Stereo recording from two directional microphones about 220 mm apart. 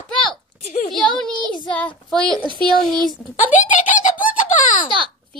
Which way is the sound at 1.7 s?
5° left (ahead or behind).